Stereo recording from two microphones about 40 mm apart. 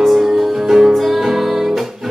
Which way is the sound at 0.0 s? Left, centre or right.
Centre.